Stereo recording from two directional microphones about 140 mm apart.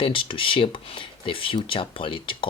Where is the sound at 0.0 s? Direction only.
40° left (ahead or behind).